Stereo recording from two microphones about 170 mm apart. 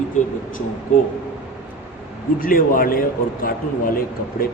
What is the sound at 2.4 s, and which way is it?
A man's voice, 55° left (ahead or behind).